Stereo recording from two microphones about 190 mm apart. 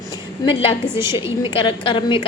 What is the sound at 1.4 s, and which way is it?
Speech, 25° left (ahead or behind).